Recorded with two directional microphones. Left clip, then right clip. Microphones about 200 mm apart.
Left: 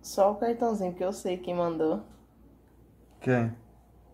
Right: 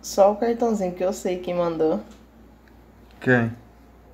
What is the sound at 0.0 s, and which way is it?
Speech, centre (ahead or behind).